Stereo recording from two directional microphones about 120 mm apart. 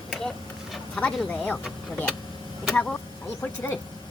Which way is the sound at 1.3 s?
10° left (ahead or behind).